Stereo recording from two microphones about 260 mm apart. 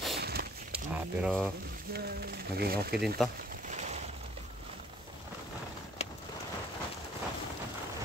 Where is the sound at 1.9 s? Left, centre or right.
Right.